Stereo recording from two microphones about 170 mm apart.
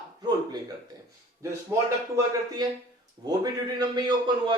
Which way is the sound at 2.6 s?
25° right (ahead or behind).